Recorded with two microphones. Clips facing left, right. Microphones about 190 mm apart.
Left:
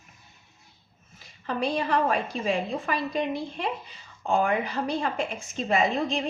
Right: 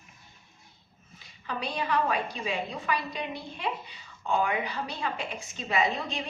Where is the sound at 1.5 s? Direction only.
45° left (ahead or behind).